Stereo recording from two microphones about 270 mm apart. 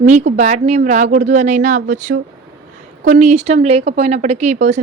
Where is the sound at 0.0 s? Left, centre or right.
Right.